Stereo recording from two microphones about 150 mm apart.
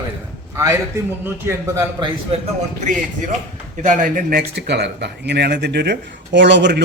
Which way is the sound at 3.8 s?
65° right (ahead or behind).